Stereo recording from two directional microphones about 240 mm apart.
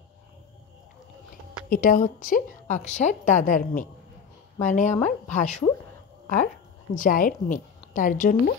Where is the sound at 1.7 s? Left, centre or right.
Left.